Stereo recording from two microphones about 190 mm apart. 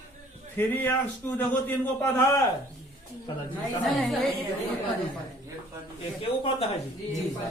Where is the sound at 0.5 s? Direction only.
10° left (ahead or behind).